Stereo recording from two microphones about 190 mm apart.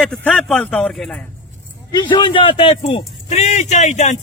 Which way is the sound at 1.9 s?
25° left (ahead or behind).